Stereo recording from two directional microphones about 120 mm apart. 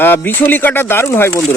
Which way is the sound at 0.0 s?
15° left (ahead or behind).